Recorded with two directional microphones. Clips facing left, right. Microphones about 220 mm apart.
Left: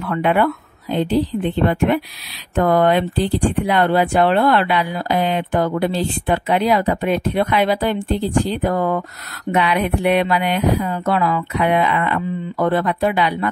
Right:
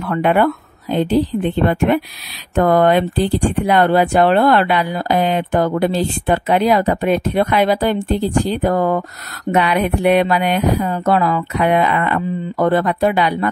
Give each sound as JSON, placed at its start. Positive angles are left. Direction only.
{"t": 0.0, "sound": "speech", "side_deg": -45}
{"t": 2.5, "sound": "speech", "side_deg": -45}